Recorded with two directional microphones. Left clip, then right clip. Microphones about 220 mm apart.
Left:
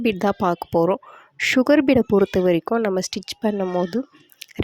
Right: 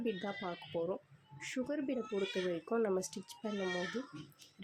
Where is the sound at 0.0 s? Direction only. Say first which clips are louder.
Left 19 dB; 45° left (ahead or behind).